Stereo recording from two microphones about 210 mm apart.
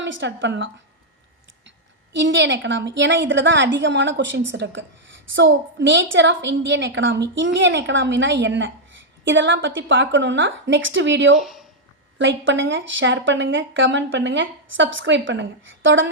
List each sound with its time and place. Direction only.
0.0 s a woman's voice: 60° right (ahead or behind)
2.1 s a woman's voice: 60° right (ahead or behind)
11.3 s speech: centre (ahead or behind)
12.1 s a woman's voice: 65° right (ahead or behind)